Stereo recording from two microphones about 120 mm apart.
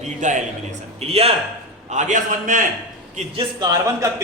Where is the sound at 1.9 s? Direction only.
90° right.